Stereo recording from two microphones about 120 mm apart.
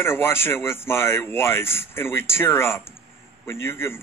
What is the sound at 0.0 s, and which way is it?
A man's voice, 20° left (ahead or behind).